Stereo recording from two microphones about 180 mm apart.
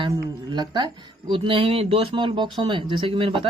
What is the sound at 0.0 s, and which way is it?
Speech, 25° right (ahead or behind).